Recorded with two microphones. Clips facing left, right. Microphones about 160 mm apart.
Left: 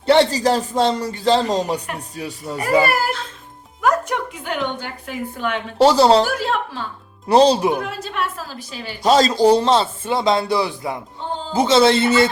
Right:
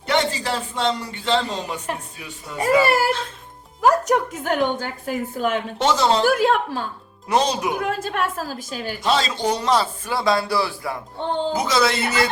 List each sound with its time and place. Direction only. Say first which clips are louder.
0.0 s speech: left 7 dB; 35° left (ahead or behind)
3.8 s a sound: right 2 dB; 35° right (ahead or behind)
5.8 s speech: left 7 dB; 35° left (ahead or behind)
6.2 s a woman's voice: right 4 dB; 50° right (ahead or behind)
7.3 s speech: left 7 dB; 30° left (ahead or behind)
7.8 s a woman's voice: right 2 dB; 50° right (ahead or behind)
9.0 s speech: left 8 dB; 40° left (ahead or behind)